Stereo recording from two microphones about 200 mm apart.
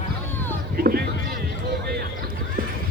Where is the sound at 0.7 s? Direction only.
50° right (ahead or behind).